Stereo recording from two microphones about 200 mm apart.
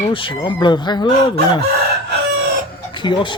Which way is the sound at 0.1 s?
25° left (ahead or behind).